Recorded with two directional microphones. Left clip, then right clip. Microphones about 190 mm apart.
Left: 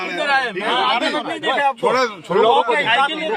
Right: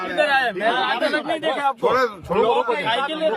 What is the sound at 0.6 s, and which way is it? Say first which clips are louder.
A man's voice: left 2 dB; 25° left (ahead or behind).